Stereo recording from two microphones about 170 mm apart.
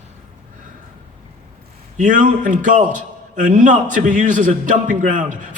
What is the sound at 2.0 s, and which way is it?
A man's voice, 50° right (ahead or behind).